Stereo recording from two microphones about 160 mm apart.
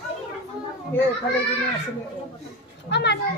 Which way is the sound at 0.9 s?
15° left (ahead or behind).